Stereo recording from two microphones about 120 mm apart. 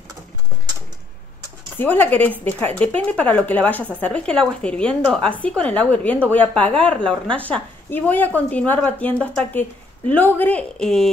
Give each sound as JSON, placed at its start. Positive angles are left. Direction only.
{"t": 1.8, "sound": "a woman's voice", "side_deg": 15}